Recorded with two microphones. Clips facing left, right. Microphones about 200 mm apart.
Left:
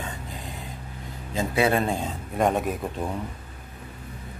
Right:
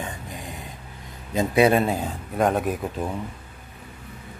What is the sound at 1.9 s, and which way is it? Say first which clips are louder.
Speech: right 1 dB; centre (ahead or behind).